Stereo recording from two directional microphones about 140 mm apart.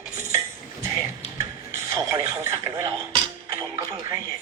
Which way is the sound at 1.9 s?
30° right (ahead or behind).